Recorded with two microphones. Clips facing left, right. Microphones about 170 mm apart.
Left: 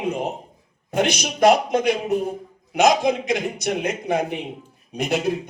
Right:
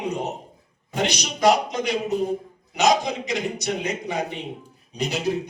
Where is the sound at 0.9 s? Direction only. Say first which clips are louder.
Left 4 dB; 55° left (ahead or behind).